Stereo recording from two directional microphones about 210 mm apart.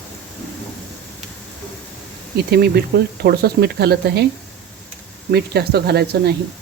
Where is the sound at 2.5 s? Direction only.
50° right (ahead or behind).